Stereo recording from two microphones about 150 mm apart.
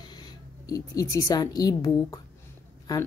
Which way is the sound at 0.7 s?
20° left (ahead or behind).